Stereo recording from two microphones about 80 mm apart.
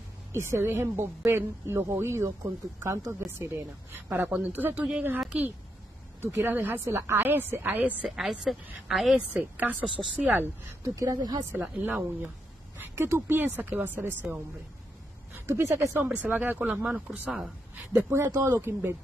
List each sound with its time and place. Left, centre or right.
0.3 s speech: right
4.3 s a woman's voice: right
6.2 s a woman's voice: right
8.0 s a woman's voice: centre
9.3 s a woman's voice: centre
11.0 s speech: right
11.5 s a woman's voice: right
15.4 s speech: right
16.1 s a woman's voice: centre
17.9 s speech: right